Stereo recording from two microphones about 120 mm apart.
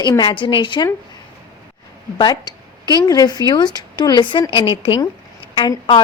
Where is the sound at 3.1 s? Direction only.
35° left (ahead or behind).